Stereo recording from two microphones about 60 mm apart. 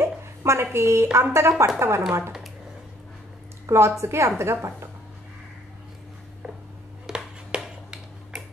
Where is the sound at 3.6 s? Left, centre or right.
Right.